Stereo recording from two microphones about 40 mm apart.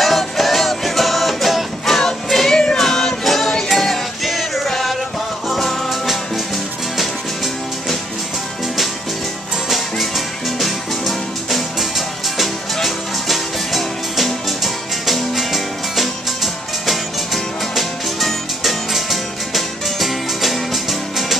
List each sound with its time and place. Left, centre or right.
0.0 s music: centre
2.5 s music: left
2.8 s music: centre
9.7 s music: centre